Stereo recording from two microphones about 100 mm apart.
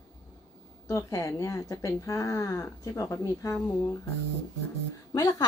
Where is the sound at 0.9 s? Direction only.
30° left (ahead or behind).